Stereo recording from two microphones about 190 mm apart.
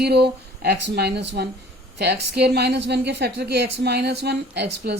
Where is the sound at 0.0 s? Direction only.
60° right (ahead or behind).